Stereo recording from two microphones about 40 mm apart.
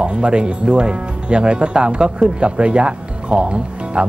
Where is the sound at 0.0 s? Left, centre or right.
Right.